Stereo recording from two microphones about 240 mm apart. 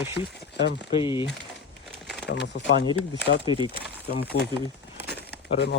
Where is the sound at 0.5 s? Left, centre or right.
Left.